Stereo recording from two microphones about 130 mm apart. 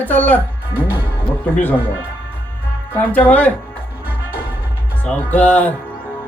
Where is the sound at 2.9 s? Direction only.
15° left (ahead or behind).